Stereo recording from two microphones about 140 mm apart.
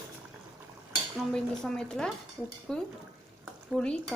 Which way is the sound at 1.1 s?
5° left (ahead or behind).